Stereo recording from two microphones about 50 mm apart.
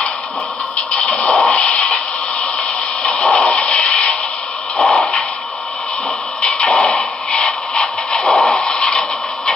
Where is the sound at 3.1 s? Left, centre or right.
Centre.